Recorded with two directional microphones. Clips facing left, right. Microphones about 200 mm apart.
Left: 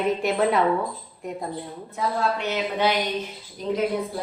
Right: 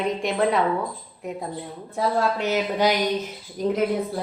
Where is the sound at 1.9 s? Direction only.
40° right (ahead or behind).